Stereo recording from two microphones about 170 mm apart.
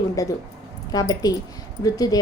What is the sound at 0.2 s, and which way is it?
A woman's voice, 20° left (ahead or behind).